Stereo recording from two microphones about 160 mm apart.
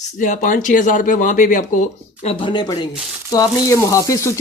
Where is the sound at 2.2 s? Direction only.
35° left (ahead or behind).